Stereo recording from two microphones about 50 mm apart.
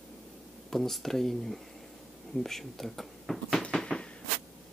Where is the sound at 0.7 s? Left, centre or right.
Centre.